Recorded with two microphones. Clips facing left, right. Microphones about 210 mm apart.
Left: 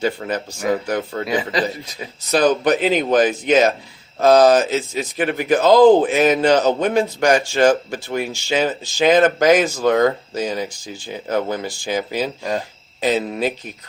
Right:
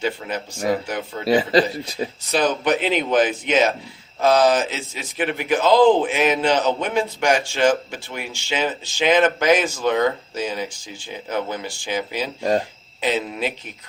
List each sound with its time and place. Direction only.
0.2 s speech: 50° left (ahead or behind)
1.2 s a man's voice: 30° right (ahead or behind)
2.3 s a man's voice: 40° left (ahead or behind)
12.4 s a man's voice: 35° right (ahead or behind)
13.0 s a man's voice: 40° left (ahead or behind)